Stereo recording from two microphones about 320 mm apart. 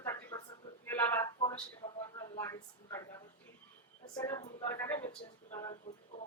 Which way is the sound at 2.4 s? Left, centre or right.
Centre.